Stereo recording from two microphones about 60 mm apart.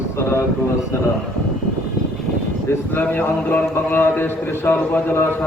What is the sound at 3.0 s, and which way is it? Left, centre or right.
Speech, left.